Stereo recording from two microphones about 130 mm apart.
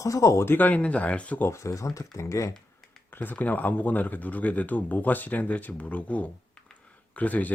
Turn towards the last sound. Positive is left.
turn(degrees=10)  # may be behind; listen again after turning